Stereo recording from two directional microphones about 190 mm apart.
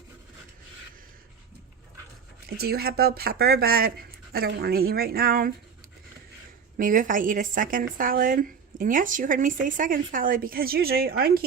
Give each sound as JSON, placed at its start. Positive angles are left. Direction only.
{"t": 2.6, "sound": "a woman's voice", "side_deg": -55}
{"t": 6.7, "sound": "a woman's voice", "side_deg": -45}